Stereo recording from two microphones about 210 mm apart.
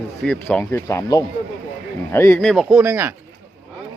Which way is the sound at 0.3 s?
5° left (ahead or behind).